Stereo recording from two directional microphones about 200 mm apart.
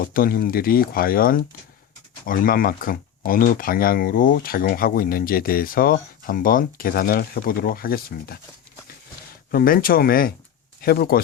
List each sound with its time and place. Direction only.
0.0 s speech: 45° left (ahead or behind)
9.5 s speech: 45° left (ahead or behind)